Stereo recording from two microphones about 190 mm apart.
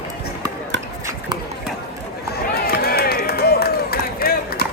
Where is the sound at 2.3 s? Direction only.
55° left (ahead or behind).